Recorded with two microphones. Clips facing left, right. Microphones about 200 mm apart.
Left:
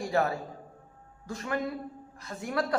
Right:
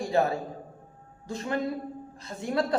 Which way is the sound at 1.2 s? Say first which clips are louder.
Right 2 dB; 25° right (ahead or behind).